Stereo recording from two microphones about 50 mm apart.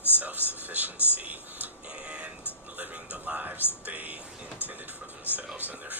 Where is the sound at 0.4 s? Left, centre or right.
Right.